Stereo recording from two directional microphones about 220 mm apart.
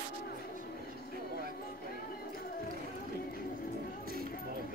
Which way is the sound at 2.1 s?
40° left (ahead or behind).